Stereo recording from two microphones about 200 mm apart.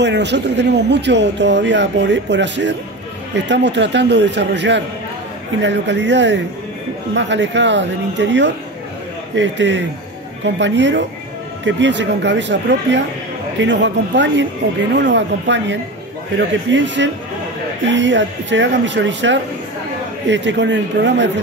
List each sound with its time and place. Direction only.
0.0 s speech: 60° right (ahead or behind)